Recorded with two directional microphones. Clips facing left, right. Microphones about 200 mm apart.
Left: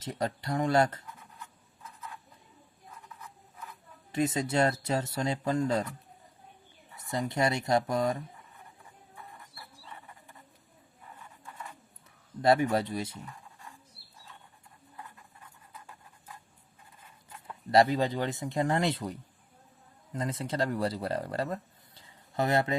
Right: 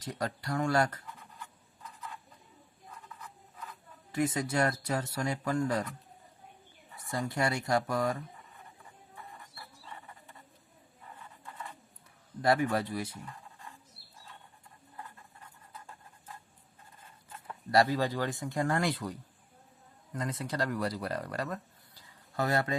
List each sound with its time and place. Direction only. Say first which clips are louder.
0.0 s speech: left 3 dB; 20° left (ahead or behind)
4.1 s speech: left 2 dB; 25° left (ahead or behind)
6.9 s speech: left 2 dB; 20° left (ahead or behind)
12.4 s speech: left 3 dB; 25° left (ahead or behind)
17.7 s speech: left 3 dB; 20° left (ahead or behind)
20.1 s speech: left 3 dB; 25° left (ahead or behind)